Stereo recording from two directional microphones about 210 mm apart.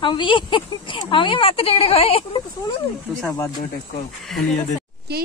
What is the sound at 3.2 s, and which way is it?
Speech, 15° left (ahead or behind).